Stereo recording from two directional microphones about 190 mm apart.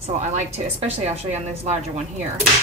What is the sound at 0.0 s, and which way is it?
A woman's voice, 35° right (ahead or behind).